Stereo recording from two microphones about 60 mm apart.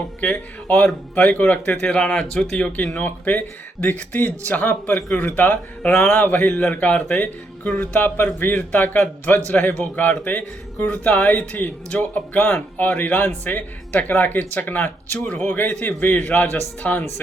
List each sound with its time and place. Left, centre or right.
0.2 s speech: left; by 2.6 s centre
3.0 s speech: left